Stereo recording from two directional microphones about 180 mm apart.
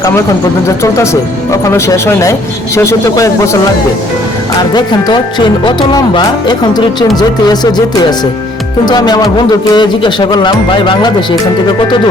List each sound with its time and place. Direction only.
0.8 s a man's voice: 15° left (ahead or behind)
4.7 s speech: 25° left (ahead or behind)
8.8 s speech: 25° left (ahead or behind)